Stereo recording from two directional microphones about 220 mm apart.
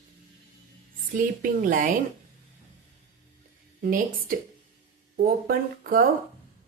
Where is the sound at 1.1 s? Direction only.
40° right (ahead or behind).